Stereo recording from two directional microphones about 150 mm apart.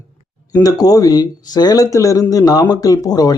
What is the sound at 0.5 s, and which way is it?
Speech, 25° left (ahead or behind).